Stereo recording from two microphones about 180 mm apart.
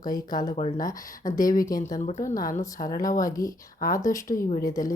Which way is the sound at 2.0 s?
45° left (ahead or behind).